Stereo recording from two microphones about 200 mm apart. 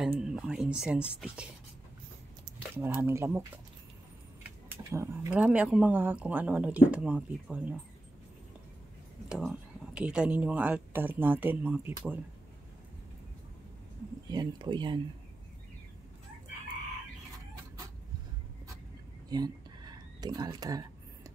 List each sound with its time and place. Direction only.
0.0 s speech: 5° right (ahead or behind)
2.7 s speech: 10° right (ahead or behind)
9.3 s speech: 5° right (ahead or behind)
14.3 s speech: 20° right (ahead or behind)
19.2 s a sound: 20° right (ahead or behind)